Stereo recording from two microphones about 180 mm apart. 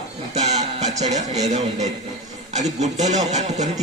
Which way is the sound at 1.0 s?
40° right (ahead or behind).